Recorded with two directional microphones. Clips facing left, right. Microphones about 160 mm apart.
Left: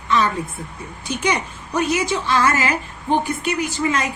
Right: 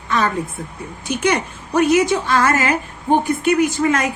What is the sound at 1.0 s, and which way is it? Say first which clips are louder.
A woman's voice: right 3 dB; 55° right (ahead or behind).